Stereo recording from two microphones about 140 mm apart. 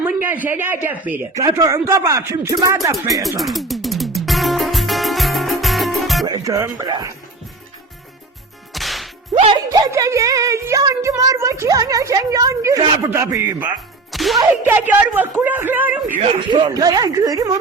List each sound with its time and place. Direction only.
0.0 s speech: 15° right (ahead or behind)
3.1 s music: centre (ahead or behind)
6.2 s speech: 25° right (ahead or behind)
8.7 s whip: centre (ahead or behind)
9.7 s speech: 25° right (ahead or behind)
14.1 s whip: centre (ahead or behind)
14.7 s speech: 10° right (ahead or behind)
16.5 s speech: 30° right (ahead or behind)